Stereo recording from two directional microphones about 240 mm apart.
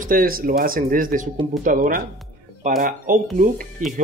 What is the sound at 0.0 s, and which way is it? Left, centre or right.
Speech, right.